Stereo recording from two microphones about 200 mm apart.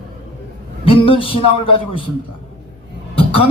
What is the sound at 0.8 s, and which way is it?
Speech, 25° left (ahead or behind).